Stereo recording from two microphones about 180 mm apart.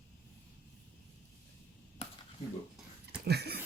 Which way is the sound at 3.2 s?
65° right (ahead or behind).